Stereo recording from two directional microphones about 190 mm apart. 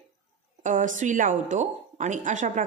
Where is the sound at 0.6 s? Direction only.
45° right (ahead or behind).